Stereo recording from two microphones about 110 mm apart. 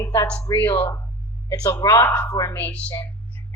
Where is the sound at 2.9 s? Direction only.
25° left (ahead or behind).